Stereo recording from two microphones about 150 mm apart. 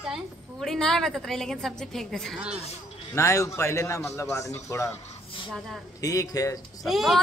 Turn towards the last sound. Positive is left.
turn(degrees=0)  # may be behind; listen again after turning